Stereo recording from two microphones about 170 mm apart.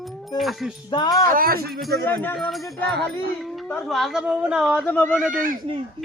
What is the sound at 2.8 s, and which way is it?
Music, 80° right.